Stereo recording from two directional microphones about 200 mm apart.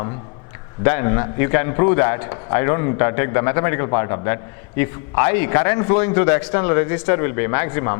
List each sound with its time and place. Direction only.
0.8 s a man's voice: 15° left (ahead or behind)